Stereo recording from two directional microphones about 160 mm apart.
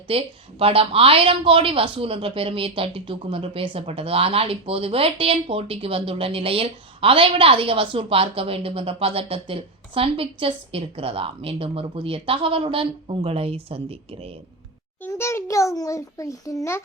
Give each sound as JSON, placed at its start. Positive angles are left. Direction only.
{"t": 0.1, "sound": "a woman's voice", "side_deg": -35}
{"t": 15.0, "sound": "a child's voice", "side_deg": 15}